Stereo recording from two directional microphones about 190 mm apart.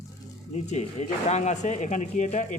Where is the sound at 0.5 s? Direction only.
35° left (ahead or behind).